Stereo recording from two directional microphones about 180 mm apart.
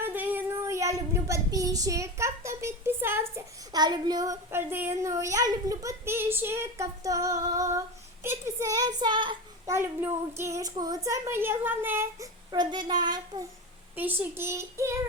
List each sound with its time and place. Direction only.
0.0 s child singing: 10° right (ahead or behind)
8.2 s speech: 15° right (ahead or behind)
9.7 s child singing: 15° right (ahead or behind)
12.5 s speech: 25° right (ahead or behind)
13.9 s child singing: 10° right (ahead or behind)